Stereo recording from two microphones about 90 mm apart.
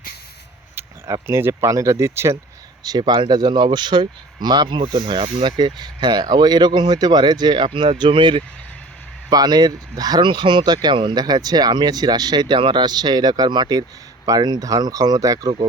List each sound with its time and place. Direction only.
1.3 s speech: 30° right (ahead or behind)
3.1 s speech: 50° right (ahead or behind)
9.3 s speech: 45° right (ahead or behind)